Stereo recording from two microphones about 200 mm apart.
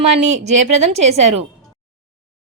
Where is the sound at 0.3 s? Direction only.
35° right (ahead or behind).